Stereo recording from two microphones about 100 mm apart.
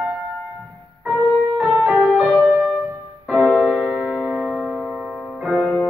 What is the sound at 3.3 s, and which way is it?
Piano, centre (ahead or behind).